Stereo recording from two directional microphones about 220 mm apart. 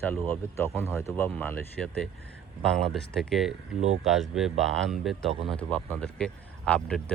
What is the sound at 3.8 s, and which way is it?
Speech, 30° right (ahead or behind).